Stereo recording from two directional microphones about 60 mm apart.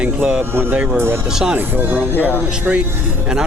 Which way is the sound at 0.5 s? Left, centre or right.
Right.